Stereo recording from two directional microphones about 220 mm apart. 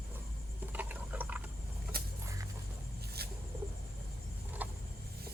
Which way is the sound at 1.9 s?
45° right (ahead or behind).